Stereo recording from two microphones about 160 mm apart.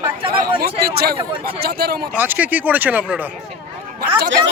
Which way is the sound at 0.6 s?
75° right (ahead or behind).